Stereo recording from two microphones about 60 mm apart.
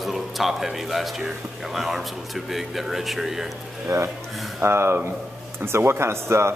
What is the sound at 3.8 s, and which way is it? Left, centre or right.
A man's voice, right.